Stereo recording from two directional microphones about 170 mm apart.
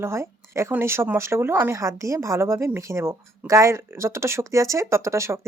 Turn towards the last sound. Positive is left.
turn(degrees=-15)  # may be behind; listen again after turning